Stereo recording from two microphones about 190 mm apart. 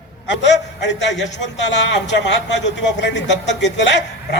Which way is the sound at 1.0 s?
70° left (ahead or behind).